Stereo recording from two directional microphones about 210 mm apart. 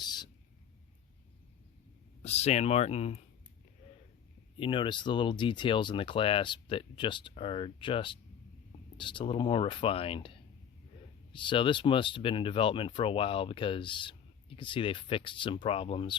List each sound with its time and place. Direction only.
0.0 s a sound: 20° left (ahead or behind)
2.2 s speech: 30° left (ahead or behind)
4.6 s speech: 25° left (ahead or behind)